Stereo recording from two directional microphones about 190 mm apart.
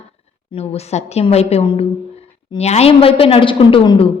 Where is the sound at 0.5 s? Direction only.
35° left (ahead or behind).